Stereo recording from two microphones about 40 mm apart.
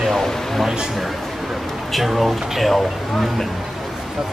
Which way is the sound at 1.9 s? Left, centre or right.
Centre.